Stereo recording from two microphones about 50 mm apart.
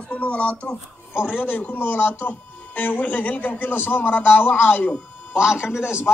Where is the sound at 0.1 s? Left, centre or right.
Left.